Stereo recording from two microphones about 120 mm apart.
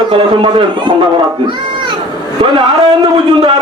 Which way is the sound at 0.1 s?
40° right (ahead or behind).